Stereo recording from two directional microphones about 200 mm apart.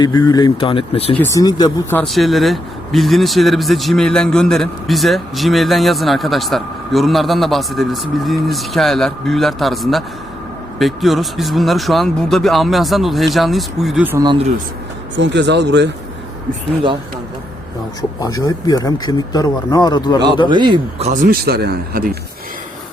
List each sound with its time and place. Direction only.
0.0 s speech: 20° left (ahead or behind)
1.2 s speech: 15° left (ahead or behind)
2.0 s a man's voice: centre (ahead or behind)
15.1 s speech: 65° right (ahead or behind)
18.2 s speech: 20° left (ahead or behind)
20.5 s a man's voice: 25° right (ahead or behind)
21.1 s speech: 45° right (ahead or behind)